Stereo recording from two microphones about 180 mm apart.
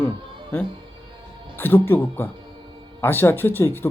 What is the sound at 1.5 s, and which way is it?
Speech, 10° left (ahead or behind).